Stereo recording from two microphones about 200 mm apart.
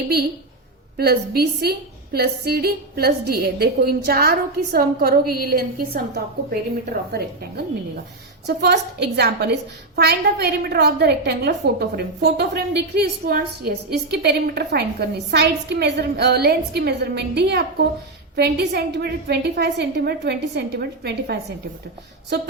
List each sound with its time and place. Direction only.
0.9 s a woman's voice: 50° right (ahead or behind)
8.4 s a woman's voice: 55° right (ahead or behind)